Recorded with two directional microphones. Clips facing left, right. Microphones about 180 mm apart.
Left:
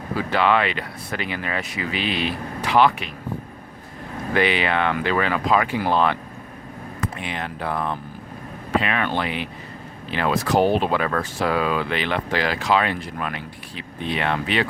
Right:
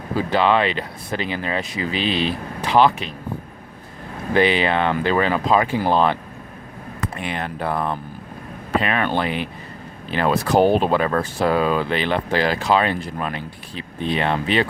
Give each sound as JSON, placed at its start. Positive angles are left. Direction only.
{"t": 0.2, "sound": "speech", "side_deg": -30}
{"t": 4.4, "sound": "speech", "side_deg": -30}
{"t": 7.2, "sound": "speech", "side_deg": -45}